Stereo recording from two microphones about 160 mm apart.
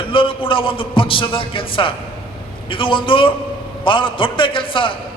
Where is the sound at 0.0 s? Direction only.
35° left (ahead or behind).